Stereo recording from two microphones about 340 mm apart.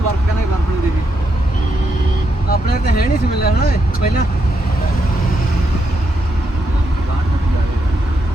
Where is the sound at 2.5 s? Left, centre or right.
Left.